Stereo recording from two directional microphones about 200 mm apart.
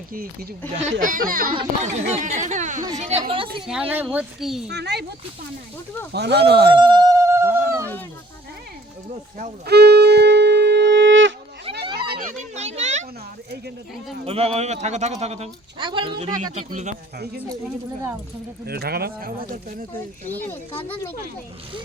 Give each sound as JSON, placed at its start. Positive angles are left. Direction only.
{"t": 0.1, "sound": "a woman's voice", "side_deg": -45}
{"t": 3.7, "sound": "speech", "side_deg": -5}
{"t": 4.7, "sound": "speech", "side_deg": -55}
{"t": 6.1, "sound": "speech", "side_deg": -55}
{"t": 6.7, "sound": "a sound", "side_deg": -20}
{"t": 9.6, "sound": "wind instrument", "side_deg": -55}
{"t": 12.1, "sound": "children playing", "side_deg": -40}
{"t": 14.3, "sound": "speech", "side_deg": -30}
{"t": 18.6, "sound": "speech", "side_deg": -50}
{"t": 20.8, "sound": "speech", "side_deg": 10}